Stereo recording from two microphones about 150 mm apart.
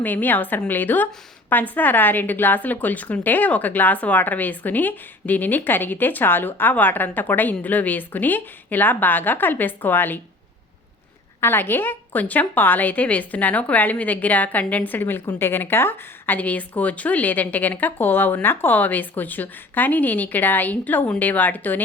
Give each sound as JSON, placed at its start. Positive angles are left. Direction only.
{"t": 0.0, "sound": "a woman's voice", "side_deg": 10}
{"t": 11.3, "sound": "a woman's voice", "side_deg": 15}